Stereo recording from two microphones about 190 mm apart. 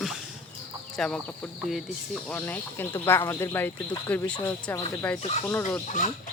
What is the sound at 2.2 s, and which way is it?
Speech, 10° left (ahead or behind).